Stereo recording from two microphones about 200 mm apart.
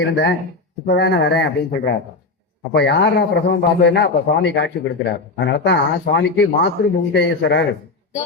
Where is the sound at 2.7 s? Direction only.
60° left (ahead or behind).